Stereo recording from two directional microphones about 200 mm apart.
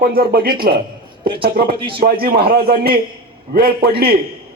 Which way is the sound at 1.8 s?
25° right (ahead or behind).